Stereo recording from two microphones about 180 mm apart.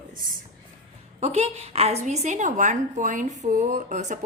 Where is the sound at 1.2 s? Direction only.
35° right (ahead or behind).